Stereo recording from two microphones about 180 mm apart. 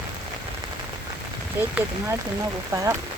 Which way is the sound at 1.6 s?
10° right (ahead or behind).